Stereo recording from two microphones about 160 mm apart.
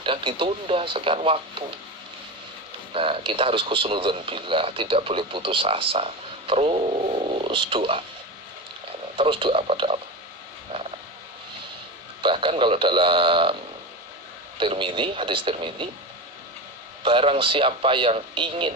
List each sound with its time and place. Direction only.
0.0 s a man's voice: 30° right (ahead or behind)
2.9 s a man's voice: 35° right (ahead or behind)
9.1 s a man's voice: 35° right (ahead or behind)
12.2 s a man's voice: 30° right (ahead or behind)
14.6 s a man's voice: 30° right (ahead or behind)
17.0 s a man's voice: 35° right (ahead or behind)